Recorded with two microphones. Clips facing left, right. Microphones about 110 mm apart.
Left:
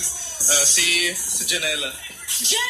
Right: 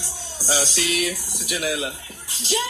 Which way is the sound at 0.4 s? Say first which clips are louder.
Right 2 dB; 25° right (ahead or behind).